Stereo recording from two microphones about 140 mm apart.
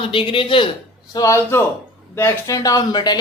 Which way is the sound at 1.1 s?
20° left (ahead or behind).